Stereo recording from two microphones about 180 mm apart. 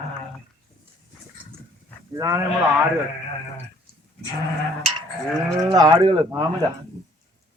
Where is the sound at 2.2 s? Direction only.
15° right (ahead or behind).